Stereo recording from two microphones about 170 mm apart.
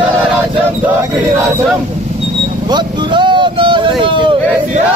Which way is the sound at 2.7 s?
25° right (ahead or behind).